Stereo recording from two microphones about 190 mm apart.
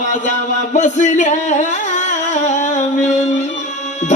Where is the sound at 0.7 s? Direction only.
40° left (ahead or behind).